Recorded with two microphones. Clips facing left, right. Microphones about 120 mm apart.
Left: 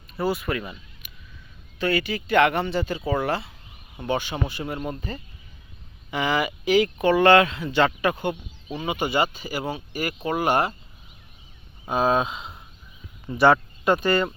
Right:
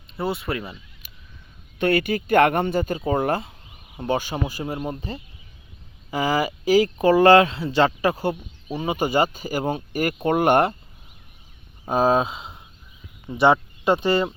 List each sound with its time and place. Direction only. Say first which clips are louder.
0.2 s speech: left 1 dB; 25° right (ahead or behind)
1.0 s a sound: left 1 dB; 35° right (ahead or behind)
1.8 s speech: right 4 dB; 55° right (ahead or behind)
11.9 s speech: right 3 dB; 40° right (ahead or behind)